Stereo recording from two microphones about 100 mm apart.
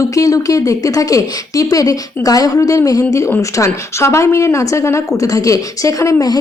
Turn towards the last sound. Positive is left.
turn(degrees=35)  # may be behind; listen again after turning